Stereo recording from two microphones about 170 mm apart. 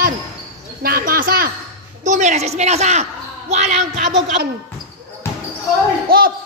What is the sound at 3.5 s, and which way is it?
Child singing, 45° right (ahead or behind).